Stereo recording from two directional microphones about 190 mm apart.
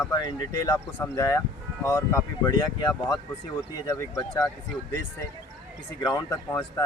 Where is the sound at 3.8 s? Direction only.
15° left (ahead or behind).